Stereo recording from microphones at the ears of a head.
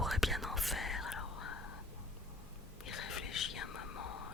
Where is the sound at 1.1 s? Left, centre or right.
Left.